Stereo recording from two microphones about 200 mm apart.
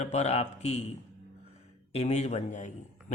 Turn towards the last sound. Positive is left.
turn(degrees=40)  # may be behind; listen again after turning